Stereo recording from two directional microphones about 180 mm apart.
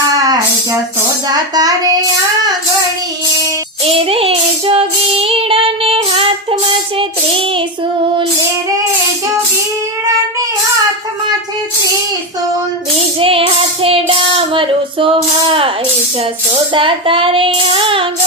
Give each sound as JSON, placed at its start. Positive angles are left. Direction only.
{"t": 0.2, "sound": "music", "side_deg": -20}
{"t": 1.3, "sound": "speech", "side_deg": -20}
{"t": 3.8, "sound": "child singing", "side_deg": -30}
{"t": 13.1, "sound": "child singing", "side_deg": -30}
{"t": 16.7, "sound": "child singing", "side_deg": -30}